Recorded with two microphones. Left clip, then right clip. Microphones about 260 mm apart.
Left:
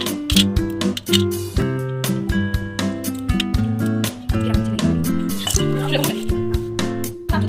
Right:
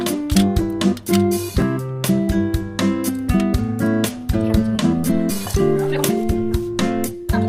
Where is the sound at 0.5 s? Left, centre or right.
Centre.